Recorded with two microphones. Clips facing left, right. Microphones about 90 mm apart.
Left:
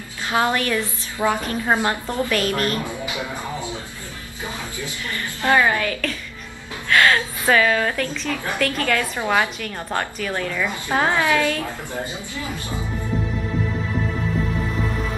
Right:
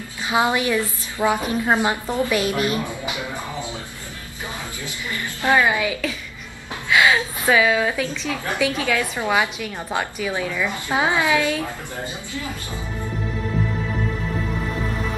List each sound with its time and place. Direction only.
0.3 s a woman's voice: 15° right (ahead or behind)
5.4 s a woman's voice: 15° right (ahead or behind)